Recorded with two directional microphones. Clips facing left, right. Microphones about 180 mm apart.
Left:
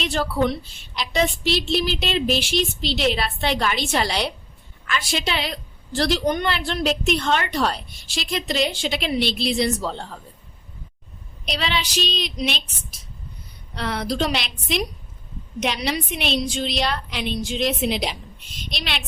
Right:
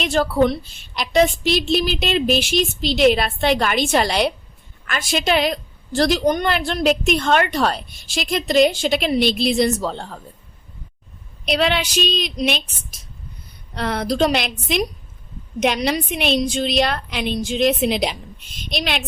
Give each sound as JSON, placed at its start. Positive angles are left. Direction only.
{"t": 0.0, "sound": "a woman's voice", "side_deg": -45}
{"t": 11.4, "sound": "a woman's voice", "side_deg": -55}
{"t": 13.7, "sound": "a woman's voice", "side_deg": -50}